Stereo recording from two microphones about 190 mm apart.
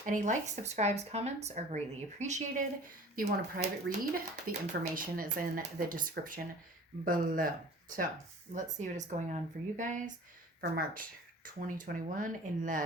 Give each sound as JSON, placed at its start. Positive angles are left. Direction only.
{"t": 0.0, "sound": "speech", "side_deg": -40}